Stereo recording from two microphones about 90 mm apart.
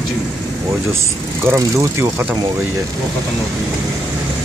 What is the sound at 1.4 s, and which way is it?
Speech, 30° right (ahead or behind).